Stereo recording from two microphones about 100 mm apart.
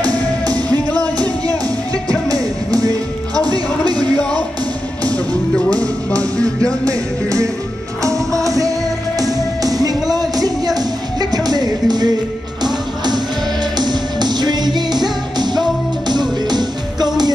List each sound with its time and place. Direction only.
0.0 s music: 40° right (ahead or behind)
2.0 s music: 35° right (ahead or behind)
5.0 s music: 10° left (ahead or behind)
6.8 s music: 35° right (ahead or behind)
8.5 s music: 35° right (ahead or behind)